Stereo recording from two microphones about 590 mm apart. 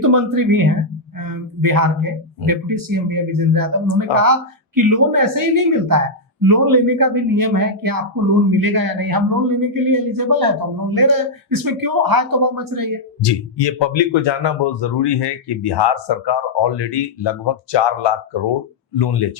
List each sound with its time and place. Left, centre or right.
0.0 s a man's voice: right
13.2 s speech: left